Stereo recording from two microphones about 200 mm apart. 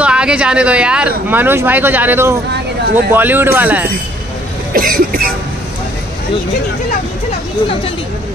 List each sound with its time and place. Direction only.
0.0 s speech: 5° right (ahead or behind)
4.7 s speech: 45° right (ahead or behind)